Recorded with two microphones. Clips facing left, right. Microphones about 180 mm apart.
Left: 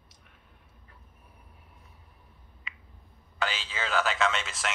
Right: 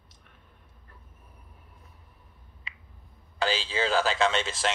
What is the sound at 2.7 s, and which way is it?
Finger snapping, 35° right (ahead or behind).